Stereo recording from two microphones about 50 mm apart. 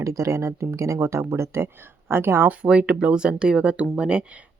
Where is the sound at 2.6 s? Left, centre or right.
Centre.